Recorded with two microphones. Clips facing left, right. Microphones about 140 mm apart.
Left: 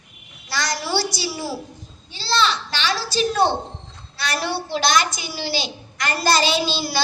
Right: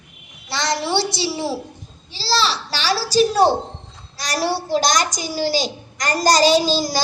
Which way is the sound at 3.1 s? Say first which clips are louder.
Right 5 dB; 40° right (ahead or behind).